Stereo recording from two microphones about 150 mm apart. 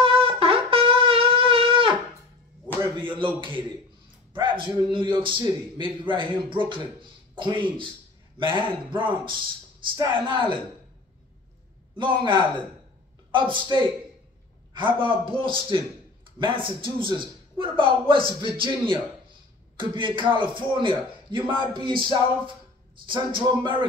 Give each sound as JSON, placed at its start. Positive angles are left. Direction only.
{"t": 0.0, "sound": "shofar", "side_deg": -40}
{"t": 3.0, "sound": "a sound", "side_deg": -35}
{"t": 4.9, "sound": "a man's voice", "side_deg": -35}
{"t": 12.0, "sound": "a man's voice", "side_deg": -30}